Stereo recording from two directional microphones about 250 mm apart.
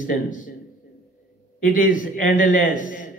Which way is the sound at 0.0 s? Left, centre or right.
Left.